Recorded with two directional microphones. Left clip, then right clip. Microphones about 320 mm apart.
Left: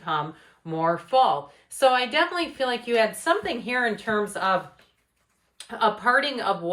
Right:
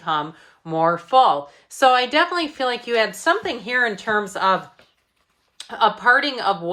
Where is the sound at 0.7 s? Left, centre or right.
Centre.